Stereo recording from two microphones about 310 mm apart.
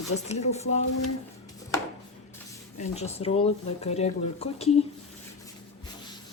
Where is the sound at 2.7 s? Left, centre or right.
Left.